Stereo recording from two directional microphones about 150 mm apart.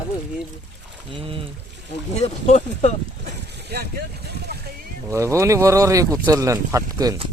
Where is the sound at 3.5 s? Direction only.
90° right.